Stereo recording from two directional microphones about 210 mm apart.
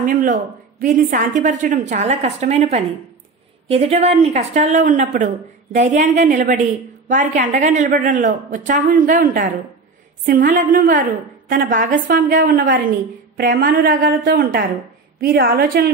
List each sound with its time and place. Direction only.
0.0 s a woman's voice: 40° right (ahead or behind)